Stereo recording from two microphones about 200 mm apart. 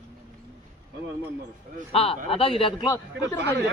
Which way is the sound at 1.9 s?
30° left (ahead or behind).